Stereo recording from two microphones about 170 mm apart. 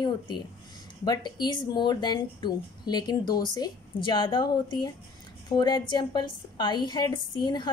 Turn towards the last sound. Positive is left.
turn(degrees=25)  # may be behind; listen again after turning